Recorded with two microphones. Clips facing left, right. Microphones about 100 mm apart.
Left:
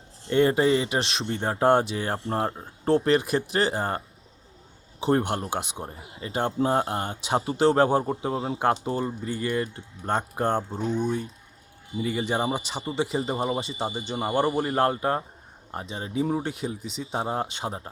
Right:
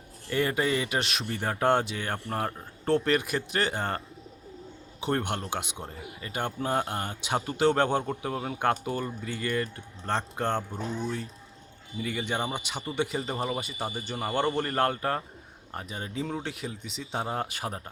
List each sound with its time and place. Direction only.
0.3 s a man's voice: 25° left (ahead or behind)
8.1 s speech: 20° left (ahead or behind)
10.0 s speech: 10° left (ahead or behind); by 14.0 s 30° left (ahead or behind)
14.1 s speech: 20° left (ahead or behind)
14.8 s speech: 25° left (ahead or behind)
16.5 s speech: 30° left (ahead or behind)